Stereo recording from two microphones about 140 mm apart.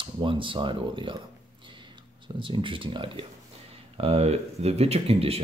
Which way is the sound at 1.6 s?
35° right (ahead or behind).